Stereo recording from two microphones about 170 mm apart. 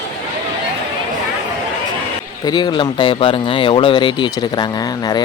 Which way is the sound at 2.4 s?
25° left (ahead or behind).